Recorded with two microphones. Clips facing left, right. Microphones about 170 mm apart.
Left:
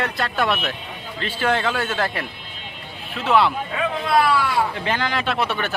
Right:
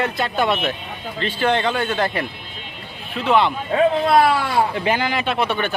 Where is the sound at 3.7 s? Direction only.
40° right (ahead or behind).